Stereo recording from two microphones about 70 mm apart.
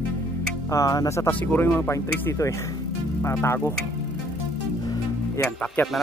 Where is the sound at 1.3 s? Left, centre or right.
Left.